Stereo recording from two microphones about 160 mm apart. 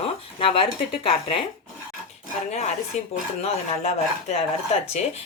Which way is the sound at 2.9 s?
45° left (ahead or behind).